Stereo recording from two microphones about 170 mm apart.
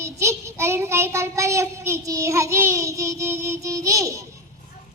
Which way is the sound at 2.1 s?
20° right (ahead or behind).